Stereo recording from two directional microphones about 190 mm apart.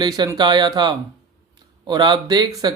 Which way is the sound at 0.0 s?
20° right (ahead or behind).